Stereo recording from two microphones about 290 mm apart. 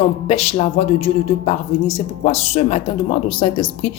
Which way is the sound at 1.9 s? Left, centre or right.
Left.